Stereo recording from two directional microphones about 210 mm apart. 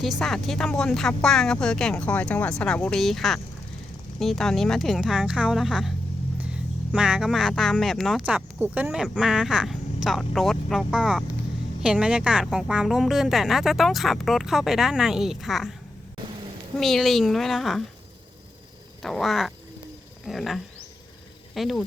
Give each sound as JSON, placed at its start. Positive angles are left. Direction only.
{"t": 0.2, "sound": "speech", "side_deg": 0}
{"t": 16.7, "sound": "speech", "side_deg": 0}
{"t": 19.0, "sound": "speech", "side_deg": 0}